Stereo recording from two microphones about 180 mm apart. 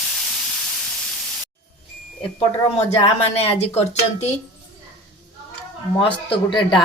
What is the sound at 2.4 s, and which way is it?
Speech, 30° left (ahead or behind).